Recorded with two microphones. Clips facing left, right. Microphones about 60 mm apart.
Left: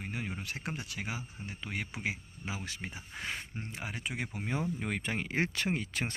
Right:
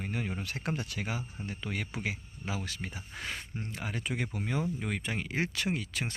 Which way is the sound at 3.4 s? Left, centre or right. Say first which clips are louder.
Right 2 dB; left.